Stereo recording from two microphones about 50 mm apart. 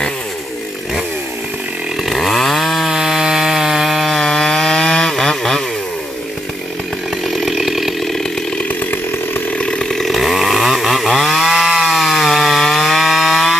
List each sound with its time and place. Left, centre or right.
2.0 s chainsaw: centre
4.2 s wood: centre
7.3 s chainsaw: centre
8.6 s chainsaw: left
9.6 s chainsaw: left
10.0 s chainsaw: centre